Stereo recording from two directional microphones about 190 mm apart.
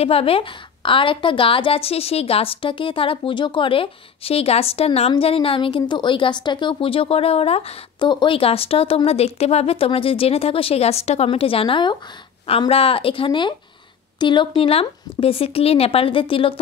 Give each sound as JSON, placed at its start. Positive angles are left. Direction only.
{"t": 0.0, "sound": "a woman's voice", "side_deg": 30}